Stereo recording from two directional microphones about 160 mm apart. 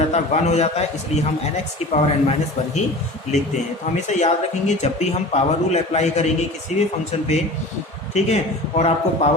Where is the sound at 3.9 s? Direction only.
45° left (ahead or behind).